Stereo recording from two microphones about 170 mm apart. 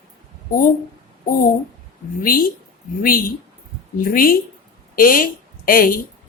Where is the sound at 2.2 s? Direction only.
60° left (ahead or behind).